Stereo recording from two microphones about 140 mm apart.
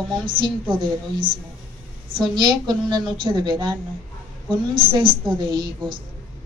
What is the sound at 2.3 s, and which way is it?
A woman's voice, 30° right (ahead or behind).